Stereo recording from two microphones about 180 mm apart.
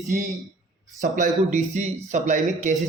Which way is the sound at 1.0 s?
45° right (ahead or behind).